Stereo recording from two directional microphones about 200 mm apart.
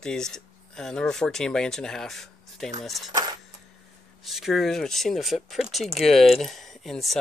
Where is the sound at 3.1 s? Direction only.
20° right (ahead or behind).